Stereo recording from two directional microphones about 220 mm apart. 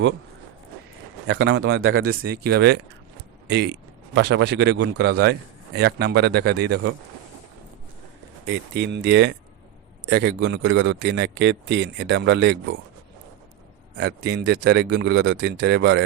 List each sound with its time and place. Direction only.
1.3 s speech: 50° right (ahead or behind); by 2.3 s 80° right
2.3 s a man's voice: 45° right (ahead or behind)
8.4 s speech: 50° right (ahead or behind)
14.0 s speech: 50° right (ahead or behind)